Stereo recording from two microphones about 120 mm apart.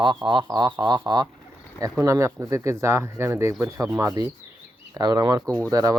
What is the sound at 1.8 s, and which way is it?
Speech, 25° right (ahead or behind).